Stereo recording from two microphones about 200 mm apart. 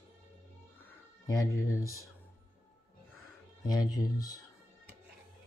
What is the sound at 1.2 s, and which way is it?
Speech, 15° left (ahead or behind).